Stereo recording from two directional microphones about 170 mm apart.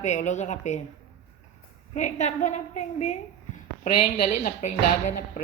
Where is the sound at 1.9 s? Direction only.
45° left (ahead or behind).